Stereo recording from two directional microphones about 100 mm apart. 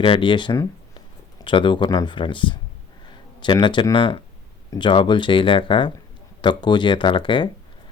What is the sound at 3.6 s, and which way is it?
Speech, 50° left (ahead or behind).